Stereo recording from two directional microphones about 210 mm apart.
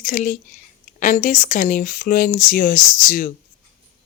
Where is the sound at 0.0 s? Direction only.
40° left (ahead or behind).